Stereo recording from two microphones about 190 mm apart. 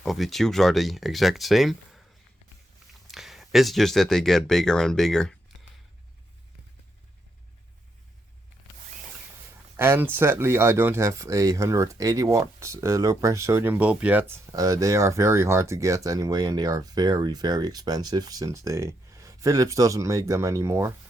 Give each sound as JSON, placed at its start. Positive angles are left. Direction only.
{"t": 0.0, "sound": "speech", "side_deg": 0}
{"t": 3.1, "sound": "speech", "side_deg": 0}
{"t": 9.7, "sound": "speech", "side_deg": -10}